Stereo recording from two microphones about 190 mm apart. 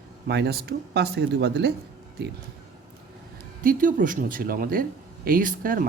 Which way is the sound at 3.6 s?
45° right (ahead or behind).